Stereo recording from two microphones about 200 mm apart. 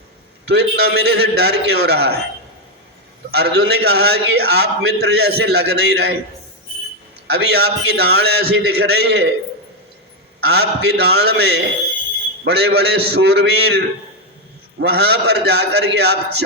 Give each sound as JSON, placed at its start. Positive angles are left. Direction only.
{"t": 0.4, "sound": "a man's voice", "side_deg": -55}
{"t": 3.3, "sound": "a man's voice", "side_deg": -55}
{"t": 7.3, "sound": "a man's voice", "side_deg": -55}
{"t": 10.5, "sound": "a man's voice", "side_deg": -55}